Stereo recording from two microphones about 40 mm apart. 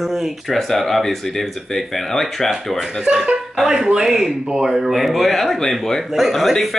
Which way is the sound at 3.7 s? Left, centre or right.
Centre.